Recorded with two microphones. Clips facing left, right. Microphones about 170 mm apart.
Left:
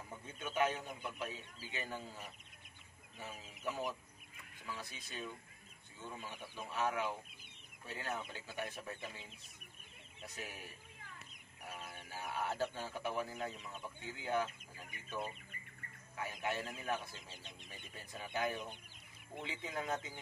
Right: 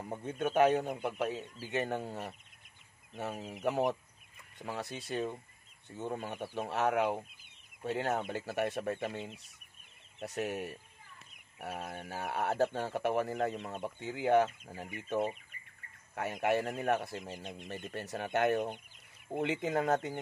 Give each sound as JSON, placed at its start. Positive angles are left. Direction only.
{"t": 0.1, "sound": "speech", "side_deg": -65}
{"t": 19.3, "sound": "speech", "side_deg": -85}